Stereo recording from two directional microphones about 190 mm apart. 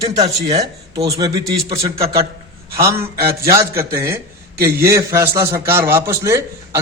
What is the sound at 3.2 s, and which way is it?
Speech, 55° right (ahead or behind).